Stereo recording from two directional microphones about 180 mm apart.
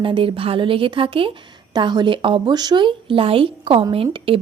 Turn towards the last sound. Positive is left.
turn(degrees=-30)  # may be behind; listen again after turning